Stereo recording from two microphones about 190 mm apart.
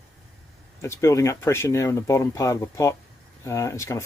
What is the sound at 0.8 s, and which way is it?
Speech, 15° left (ahead or behind).